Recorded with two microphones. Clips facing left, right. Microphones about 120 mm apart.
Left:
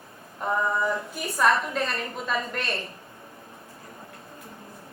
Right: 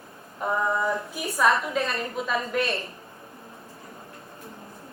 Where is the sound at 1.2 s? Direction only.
5° right (ahead or behind).